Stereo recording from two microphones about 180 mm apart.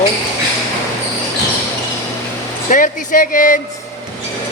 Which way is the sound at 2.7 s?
50° left (ahead or behind).